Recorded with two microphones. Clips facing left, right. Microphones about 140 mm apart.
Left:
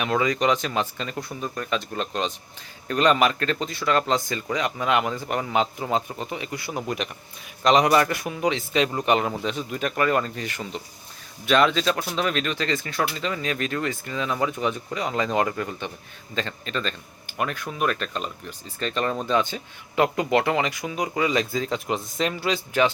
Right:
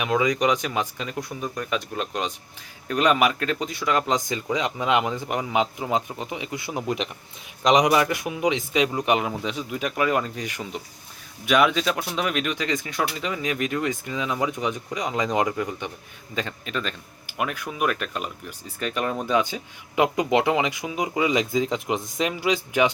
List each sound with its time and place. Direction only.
0.0 s speech: 10° right (ahead or behind)